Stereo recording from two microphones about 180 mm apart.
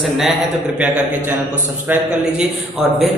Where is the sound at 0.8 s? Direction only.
10° right (ahead or behind).